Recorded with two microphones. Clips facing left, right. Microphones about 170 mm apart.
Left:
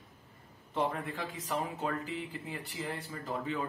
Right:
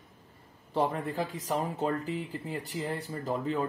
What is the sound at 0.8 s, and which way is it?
Speech, 35° right (ahead or behind).